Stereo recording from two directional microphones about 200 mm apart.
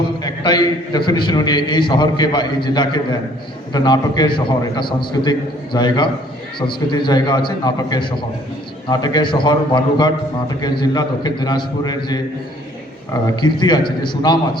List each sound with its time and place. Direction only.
0.2 s a man's voice: 20° left (ahead or behind)
13.2 s a man's voice: 20° left (ahead or behind)